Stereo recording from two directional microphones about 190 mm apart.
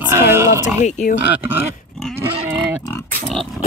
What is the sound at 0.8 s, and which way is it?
Speech, 40° left (ahead or behind).